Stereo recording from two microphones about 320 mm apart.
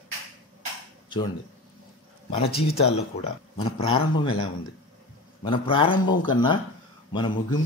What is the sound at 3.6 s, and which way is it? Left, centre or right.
Speech, centre.